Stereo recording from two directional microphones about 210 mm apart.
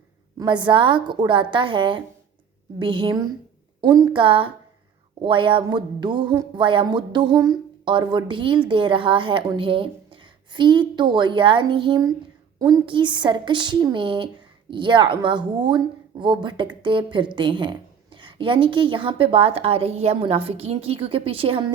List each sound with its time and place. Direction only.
0.3 s a woman's voice: 20° right (ahead or behind)